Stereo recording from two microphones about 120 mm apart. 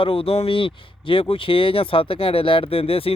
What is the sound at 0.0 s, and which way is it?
Speech, 50° left (ahead or behind).